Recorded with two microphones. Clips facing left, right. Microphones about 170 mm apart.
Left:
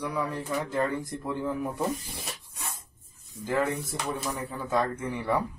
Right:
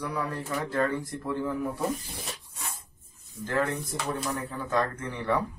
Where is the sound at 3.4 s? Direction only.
5° left (ahead or behind).